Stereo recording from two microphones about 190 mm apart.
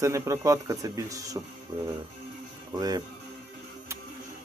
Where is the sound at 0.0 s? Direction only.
15° right (ahead or behind).